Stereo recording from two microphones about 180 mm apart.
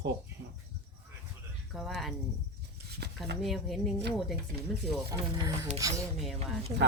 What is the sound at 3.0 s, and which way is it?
Cutlery, 65° right (ahead or behind).